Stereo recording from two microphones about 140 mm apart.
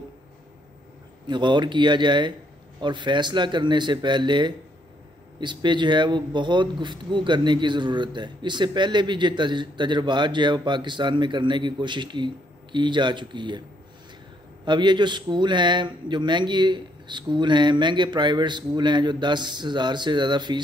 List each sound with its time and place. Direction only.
1.2 s speech: 35° right (ahead or behind)